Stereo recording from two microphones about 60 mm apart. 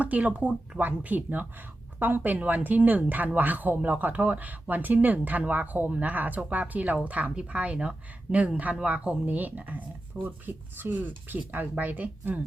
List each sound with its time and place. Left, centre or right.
0.0 s a woman's voice: right